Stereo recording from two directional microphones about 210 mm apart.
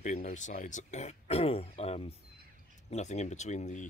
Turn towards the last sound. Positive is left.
turn(degrees=35)  # may be behind; listen again after turning